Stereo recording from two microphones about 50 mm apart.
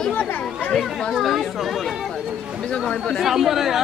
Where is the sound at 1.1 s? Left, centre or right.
Centre.